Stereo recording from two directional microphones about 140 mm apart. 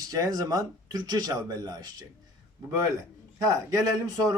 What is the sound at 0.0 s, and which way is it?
Speech, 25° right (ahead or behind).